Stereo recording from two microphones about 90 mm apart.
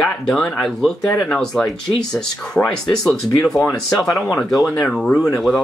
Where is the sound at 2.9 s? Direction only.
5° left (ahead or behind).